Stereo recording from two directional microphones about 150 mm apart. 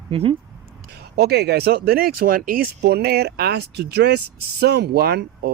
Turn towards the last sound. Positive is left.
turn(degrees=-90)